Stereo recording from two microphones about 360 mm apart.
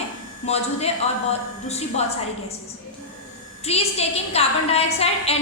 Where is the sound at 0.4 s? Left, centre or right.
Centre.